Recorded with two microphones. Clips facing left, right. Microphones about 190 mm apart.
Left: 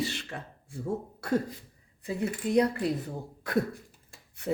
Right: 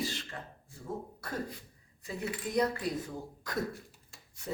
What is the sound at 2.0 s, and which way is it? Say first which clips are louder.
Speech: left 6 dB; 60° left (ahead or behind).